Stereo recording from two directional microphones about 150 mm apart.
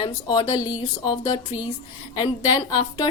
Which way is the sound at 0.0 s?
30° left (ahead or behind).